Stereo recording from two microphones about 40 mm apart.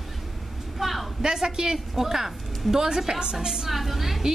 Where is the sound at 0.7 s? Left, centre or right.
Centre.